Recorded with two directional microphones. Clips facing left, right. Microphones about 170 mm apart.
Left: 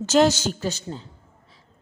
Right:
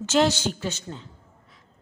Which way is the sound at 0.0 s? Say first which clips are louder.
Left 3 dB; 40° left (ahead or behind).